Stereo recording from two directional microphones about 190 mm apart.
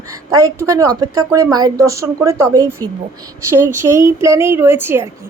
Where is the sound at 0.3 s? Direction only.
15° right (ahead or behind).